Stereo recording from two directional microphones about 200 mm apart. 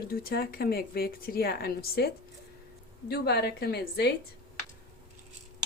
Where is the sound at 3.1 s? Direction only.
55° left (ahead or behind).